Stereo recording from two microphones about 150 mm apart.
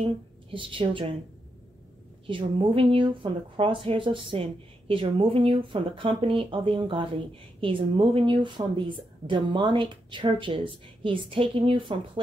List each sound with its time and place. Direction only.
0.0 s a woman's voice: 35° right (ahead or behind)
2.2 s speech: 35° right (ahead or behind)